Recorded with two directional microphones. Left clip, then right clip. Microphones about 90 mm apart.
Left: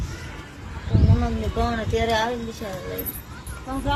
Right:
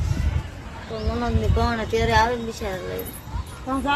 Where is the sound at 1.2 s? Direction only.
25° right (ahead or behind).